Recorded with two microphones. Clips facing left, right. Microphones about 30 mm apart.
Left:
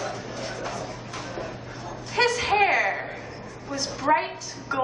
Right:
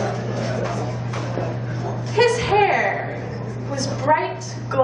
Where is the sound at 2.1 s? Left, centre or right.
Centre.